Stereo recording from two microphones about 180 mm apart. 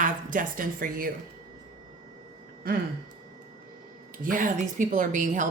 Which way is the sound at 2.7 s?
55° right (ahead or behind).